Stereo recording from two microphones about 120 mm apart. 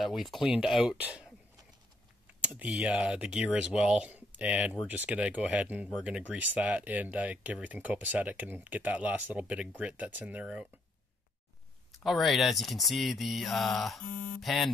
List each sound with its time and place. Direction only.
0.0 s speech: centre (ahead or behind)
2.4 s speech: 10° right (ahead or behind)
12.0 s speech: centre (ahead or behind)
14.1 s speech: 90° left
14.4 s speech: centre (ahead or behind)